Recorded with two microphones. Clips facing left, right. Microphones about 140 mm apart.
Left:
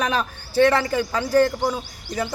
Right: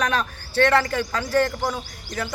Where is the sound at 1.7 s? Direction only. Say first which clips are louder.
Left 2 dB; 25° left (ahead or behind).